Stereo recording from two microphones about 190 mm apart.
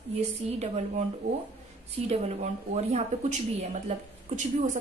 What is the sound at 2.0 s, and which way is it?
A woman's voice, 35° right (ahead or behind).